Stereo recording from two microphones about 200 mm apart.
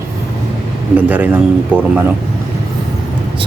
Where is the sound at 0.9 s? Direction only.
5° right (ahead or behind).